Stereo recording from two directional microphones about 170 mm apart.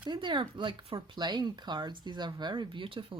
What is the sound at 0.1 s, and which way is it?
Speech, 30° right (ahead or behind).